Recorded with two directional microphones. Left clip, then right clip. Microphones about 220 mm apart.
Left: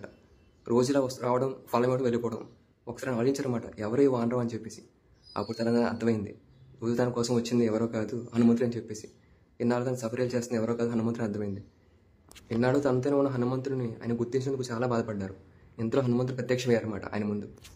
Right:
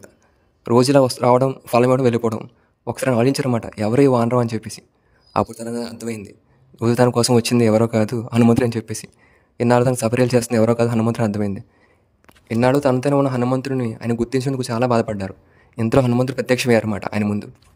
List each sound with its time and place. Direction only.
0.7 s speech: 40° right (ahead or behind)
5.5 s a man's voice: centre (ahead or behind)
6.8 s speech: 45° right (ahead or behind)